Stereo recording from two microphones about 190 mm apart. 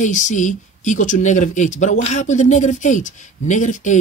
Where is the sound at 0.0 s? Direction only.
40° left (ahead or behind).